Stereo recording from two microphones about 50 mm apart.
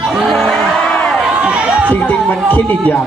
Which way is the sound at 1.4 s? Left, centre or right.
Right.